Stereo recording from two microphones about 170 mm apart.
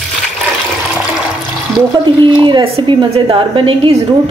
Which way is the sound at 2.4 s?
30° right (ahead or behind).